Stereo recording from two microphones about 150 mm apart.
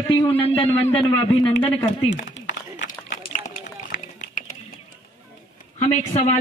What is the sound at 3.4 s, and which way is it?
Run, 55° left (ahead or behind).